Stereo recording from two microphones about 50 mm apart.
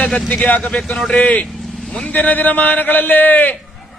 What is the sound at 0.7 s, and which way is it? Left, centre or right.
Speech, centre.